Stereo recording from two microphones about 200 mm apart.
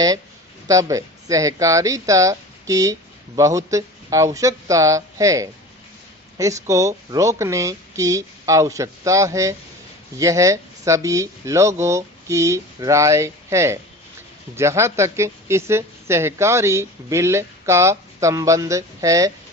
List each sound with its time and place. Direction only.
0.7 s a woman's voice: 15° right (ahead or behind)